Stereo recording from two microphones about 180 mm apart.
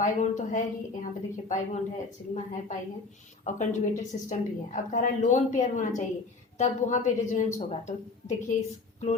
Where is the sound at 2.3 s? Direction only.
45° left (ahead or behind).